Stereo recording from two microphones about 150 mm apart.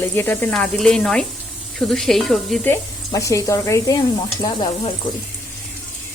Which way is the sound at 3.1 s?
20° left (ahead or behind).